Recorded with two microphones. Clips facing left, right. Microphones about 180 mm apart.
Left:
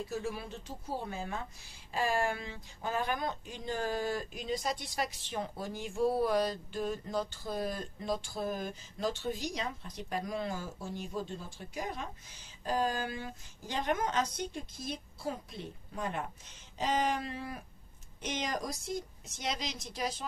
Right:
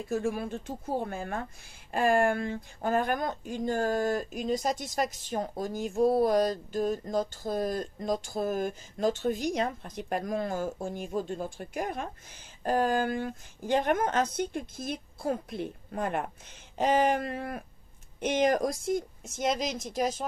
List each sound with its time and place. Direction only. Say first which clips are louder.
0.1 s speech: right 7 dB; 50° right (ahead or behind)